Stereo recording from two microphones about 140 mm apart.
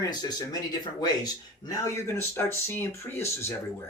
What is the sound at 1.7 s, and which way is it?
Speech, 20° left (ahead or behind).